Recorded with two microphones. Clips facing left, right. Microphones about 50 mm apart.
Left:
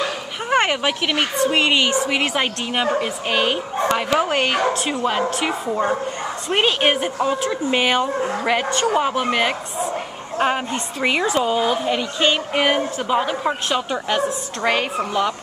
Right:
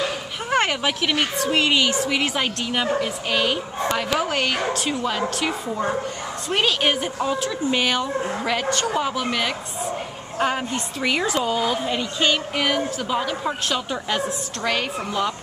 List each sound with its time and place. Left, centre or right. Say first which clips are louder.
0.5 s a woman's voice: left 3 dB; centre